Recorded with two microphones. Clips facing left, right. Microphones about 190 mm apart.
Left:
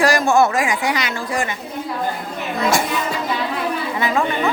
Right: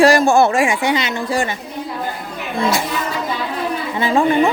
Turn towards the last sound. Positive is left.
turn(degrees=-30)  # may be behind; listen again after turning